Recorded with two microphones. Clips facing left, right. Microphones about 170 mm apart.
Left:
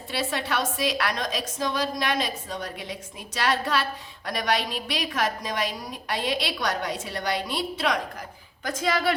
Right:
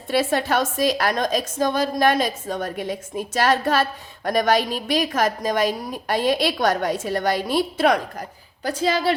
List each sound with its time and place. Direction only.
0.1 s a woman's voice: 50° right (ahead or behind)
8.6 s speech: 30° right (ahead or behind)